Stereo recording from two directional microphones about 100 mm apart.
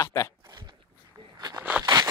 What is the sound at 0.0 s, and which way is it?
Speech, 35° left (ahead or behind).